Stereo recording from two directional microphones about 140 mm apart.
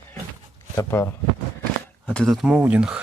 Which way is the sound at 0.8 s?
20° left (ahead or behind).